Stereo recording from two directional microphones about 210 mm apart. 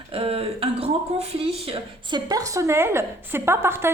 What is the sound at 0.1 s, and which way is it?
Speech, 25° right (ahead or behind).